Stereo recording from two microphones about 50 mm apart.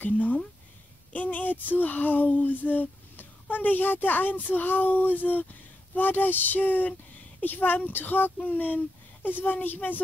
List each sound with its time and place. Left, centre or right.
0.0 s speech: left